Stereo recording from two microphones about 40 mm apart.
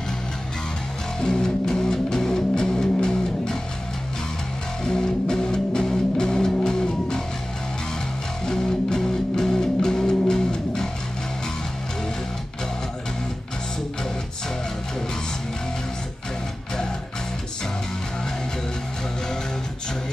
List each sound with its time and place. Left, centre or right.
1.2 s music: centre
4.8 s music: centre
8.5 s music: centre